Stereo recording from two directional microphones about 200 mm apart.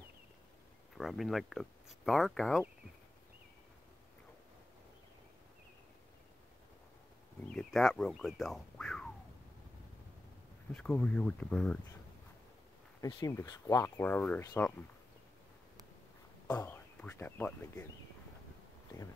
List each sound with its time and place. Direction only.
0.9 s speech: centre (ahead or behind)
7.5 s a sound: centre (ahead or behind)
10.7 s speech: 5° left (ahead or behind)
13.0 s speech: 20° left (ahead or behind)
16.4 s speech: 15° left (ahead or behind)